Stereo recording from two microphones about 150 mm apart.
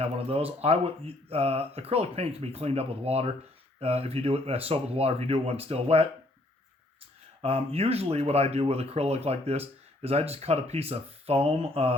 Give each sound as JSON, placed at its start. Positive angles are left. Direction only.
{"t": 0.0, "sound": "speech", "side_deg": -40}
{"t": 7.4, "sound": "speech", "side_deg": -45}